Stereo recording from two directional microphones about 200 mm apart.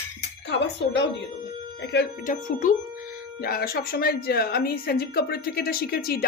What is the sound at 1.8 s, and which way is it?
Speech, 60° left (ahead or behind).